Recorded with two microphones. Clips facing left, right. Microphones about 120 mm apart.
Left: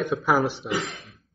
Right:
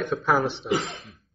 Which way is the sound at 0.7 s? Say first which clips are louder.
Right 2 dB; 25° right (ahead or behind).